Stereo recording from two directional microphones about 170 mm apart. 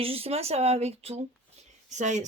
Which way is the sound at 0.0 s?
35° right (ahead or behind).